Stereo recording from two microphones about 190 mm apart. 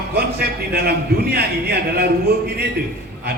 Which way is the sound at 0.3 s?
55° right (ahead or behind).